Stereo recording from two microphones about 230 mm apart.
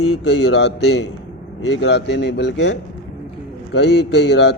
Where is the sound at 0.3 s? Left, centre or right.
Left.